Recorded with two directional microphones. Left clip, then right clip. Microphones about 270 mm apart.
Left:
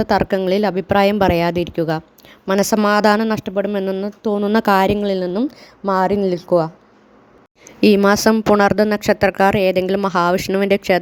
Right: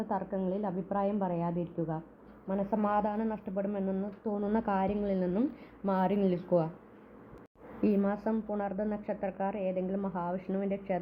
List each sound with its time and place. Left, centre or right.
0.0 s a woman's voice: left
7.8 s a woman's voice: left